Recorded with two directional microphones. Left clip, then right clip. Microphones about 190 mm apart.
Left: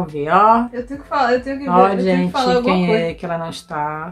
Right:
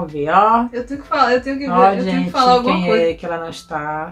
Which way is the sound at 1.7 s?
45° left (ahead or behind).